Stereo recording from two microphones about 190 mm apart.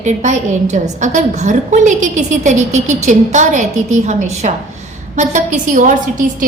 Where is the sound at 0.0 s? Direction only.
40° right (ahead or behind).